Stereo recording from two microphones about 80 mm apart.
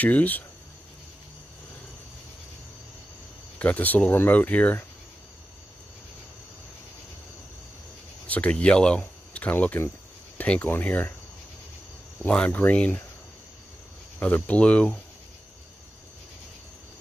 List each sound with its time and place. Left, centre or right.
0.0 s speech: centre
3.5 s speech: centre
8.3 s speech: centre
12.2 s speech: centre
14.2 s speech: centre